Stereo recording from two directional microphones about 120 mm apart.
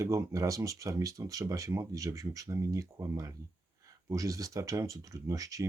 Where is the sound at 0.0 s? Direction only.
25° right (ahead or behind).